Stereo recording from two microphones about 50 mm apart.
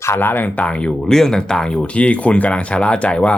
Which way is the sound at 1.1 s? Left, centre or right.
Centre.